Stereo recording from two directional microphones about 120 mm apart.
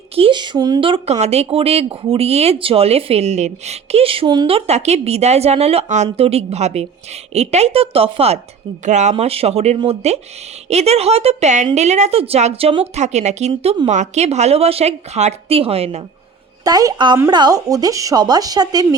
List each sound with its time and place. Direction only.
0.2 s speech: 40° right (ahead or behind)
1.1 s speech: 60° right (ahead or behind)
8.8 s speech: 80° right; by 16.0 s 55° right (ahead or behind)
16.6 s speech: 30° right (ahead or behind)